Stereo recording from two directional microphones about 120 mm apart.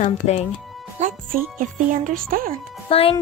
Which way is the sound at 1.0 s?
75° right (ahead or behind).